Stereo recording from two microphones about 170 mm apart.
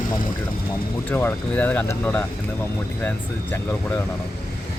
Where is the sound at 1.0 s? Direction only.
10° left (ahead or behind).